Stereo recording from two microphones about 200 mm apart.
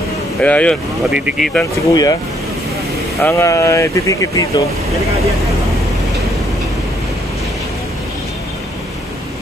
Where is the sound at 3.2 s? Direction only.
15° left (ahead or behind).